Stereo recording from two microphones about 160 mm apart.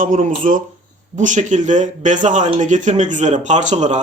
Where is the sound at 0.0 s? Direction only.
55° right (ahead or behind).